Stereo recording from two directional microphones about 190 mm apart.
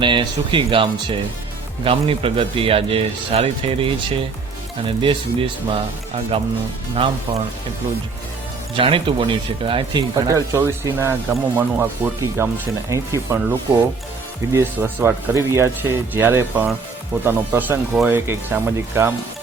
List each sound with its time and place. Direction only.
0.0 s speech: 25° right (ahead or behind)
8.7 s speech: 30° right (ahead or behind); by 19.1 s 10° right (ahead or behind)